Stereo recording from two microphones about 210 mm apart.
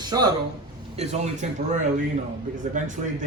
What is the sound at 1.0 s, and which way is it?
Speech, 35° right (ahead or behind).